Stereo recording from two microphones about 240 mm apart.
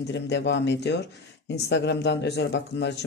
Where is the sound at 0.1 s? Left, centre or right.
Left.